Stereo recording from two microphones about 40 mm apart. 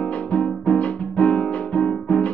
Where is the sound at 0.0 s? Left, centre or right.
Left.